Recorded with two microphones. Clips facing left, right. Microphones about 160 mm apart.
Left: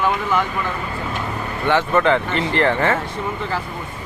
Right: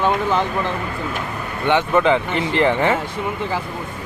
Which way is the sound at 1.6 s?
20° right (ahead or behind).